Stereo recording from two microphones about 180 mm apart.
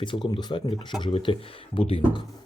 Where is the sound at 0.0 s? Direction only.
25° left (ahead or behind).